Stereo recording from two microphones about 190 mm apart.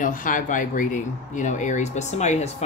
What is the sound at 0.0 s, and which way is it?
Speech, 45° left (ahead or behind).